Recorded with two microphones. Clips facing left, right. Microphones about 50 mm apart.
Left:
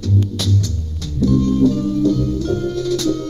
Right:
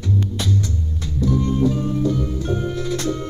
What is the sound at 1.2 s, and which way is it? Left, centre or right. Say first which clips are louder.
Music: left 5 dB; right.